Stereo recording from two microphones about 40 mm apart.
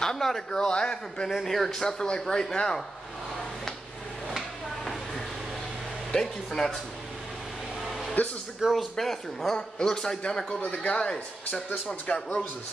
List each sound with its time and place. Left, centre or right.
0.0 s speech: centre
1.3 s speech: centre
6.1 s speech: centre
8.2 s speech: left
8.7 s speech: centre
10.6 s speech: left
10.9 s speech: left
11.9 s speech: left